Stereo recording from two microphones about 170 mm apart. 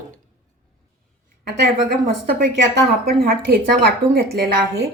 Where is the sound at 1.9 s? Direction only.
70° right (ahead or behind).